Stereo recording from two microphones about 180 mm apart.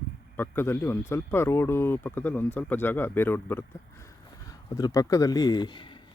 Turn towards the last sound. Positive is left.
turn(degrees=25)  # may be behind; listen again after turning